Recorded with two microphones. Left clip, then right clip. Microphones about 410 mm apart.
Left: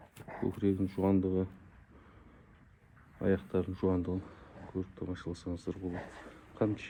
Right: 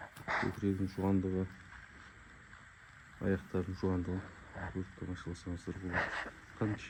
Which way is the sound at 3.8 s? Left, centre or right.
Left.